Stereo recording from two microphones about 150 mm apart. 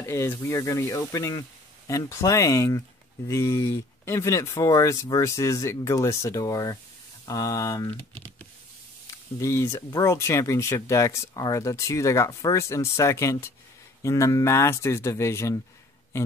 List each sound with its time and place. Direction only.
0.0 s speech: 15° left (ahead or behind)
9.4 s speech: 20° left (ahead or behind)